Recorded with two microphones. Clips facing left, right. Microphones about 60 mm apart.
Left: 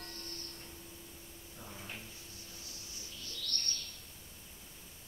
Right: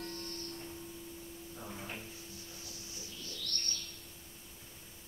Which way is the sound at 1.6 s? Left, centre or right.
Centre.